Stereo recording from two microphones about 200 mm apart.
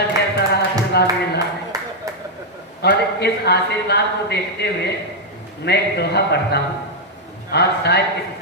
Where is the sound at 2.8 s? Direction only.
55° left (ahead or behind).